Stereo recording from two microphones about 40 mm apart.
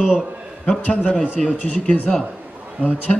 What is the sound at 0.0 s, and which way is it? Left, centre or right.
Speech, centre.